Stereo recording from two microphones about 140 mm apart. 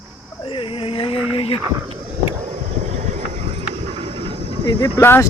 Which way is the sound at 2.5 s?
55° right (ahead or behind).